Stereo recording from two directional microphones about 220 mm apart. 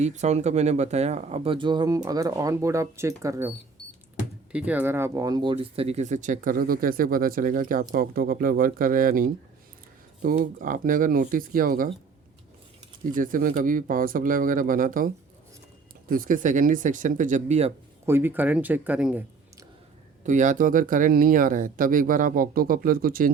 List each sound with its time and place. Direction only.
0.0 s speech: 30° right (ahead or behind); by 3.5 s 15° right (ahead or behind)
4.5 s speech: 5° right (ahead or behind); by 11.9 s 40° right (ahead or behind)
13.1 s speech: 40° right (ahead or behind)
18.0 s speech: 10° right (ahead or behind)
20.2 s speech: 35° right (ahead or behind)